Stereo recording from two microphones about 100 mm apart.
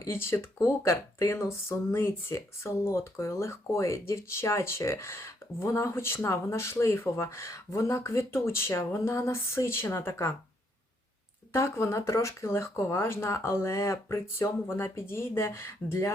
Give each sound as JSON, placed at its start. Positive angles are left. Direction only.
{"t": 0.0, "sound": "speech", "side_deg": 25}
{"t": 11.5, "sound": "speech", "side_deg": 30}